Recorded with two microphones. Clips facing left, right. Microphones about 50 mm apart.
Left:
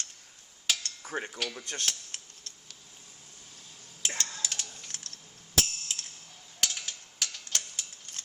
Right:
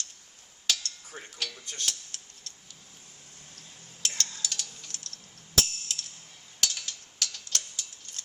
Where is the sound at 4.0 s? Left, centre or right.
Left.